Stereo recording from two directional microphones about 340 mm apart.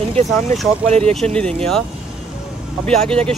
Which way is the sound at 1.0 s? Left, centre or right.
Centre.